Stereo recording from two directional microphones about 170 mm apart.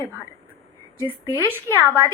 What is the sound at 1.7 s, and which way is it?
Speech, 15° left (ahead or behind).